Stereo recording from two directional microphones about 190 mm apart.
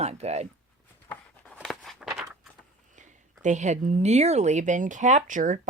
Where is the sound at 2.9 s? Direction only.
40° right (ahead or behind).